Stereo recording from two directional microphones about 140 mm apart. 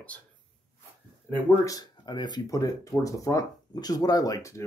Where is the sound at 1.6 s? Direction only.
30° left (ahead or behind).